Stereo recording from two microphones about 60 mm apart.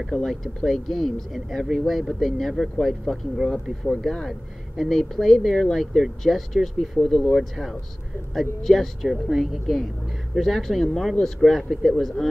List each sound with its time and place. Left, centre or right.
0.1 s speech: centre